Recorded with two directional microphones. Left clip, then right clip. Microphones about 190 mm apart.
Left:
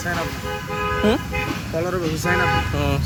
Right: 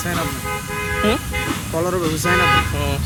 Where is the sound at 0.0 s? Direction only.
50° right (ahead or behind).